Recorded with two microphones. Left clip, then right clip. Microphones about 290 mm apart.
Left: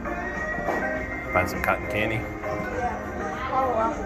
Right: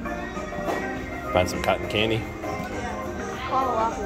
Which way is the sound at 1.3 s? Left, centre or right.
Right.